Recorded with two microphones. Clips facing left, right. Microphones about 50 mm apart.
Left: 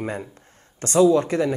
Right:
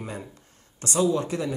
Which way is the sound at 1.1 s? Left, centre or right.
Left.